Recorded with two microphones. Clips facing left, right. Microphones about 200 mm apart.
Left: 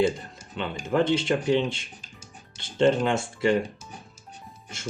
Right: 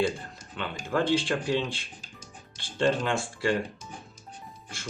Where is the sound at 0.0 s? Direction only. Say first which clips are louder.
Left 4 dB; 25° left (ahead or behind).